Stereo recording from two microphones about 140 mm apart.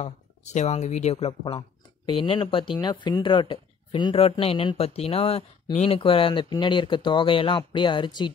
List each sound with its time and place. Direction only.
0.0 s speech: 55° left (ahead or behind)
2.0 s speech: 40° left (ahead or behind)
5.9 s speech: 40° left (ahead or behind)